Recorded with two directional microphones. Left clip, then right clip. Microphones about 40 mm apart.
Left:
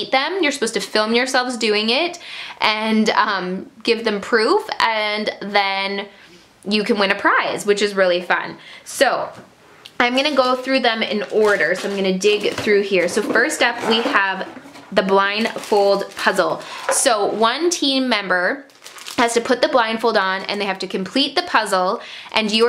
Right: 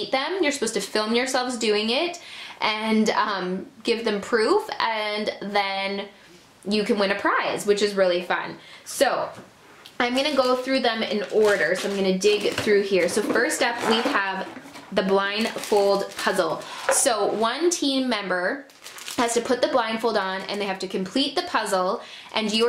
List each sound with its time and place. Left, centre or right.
0.4 s a woman's voice: left
10.4 s speech: centre
10.8 s a woman's voice: left
11.1 s speech: centre
14.1 s speech: centre
15.0 s a woman's voice: left
15.3 s speech: centre
16.9 s speech: left